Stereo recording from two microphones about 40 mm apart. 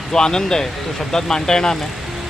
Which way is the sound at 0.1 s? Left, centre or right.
Centre.